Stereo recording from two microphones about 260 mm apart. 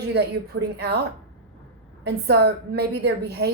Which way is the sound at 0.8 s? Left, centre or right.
Right.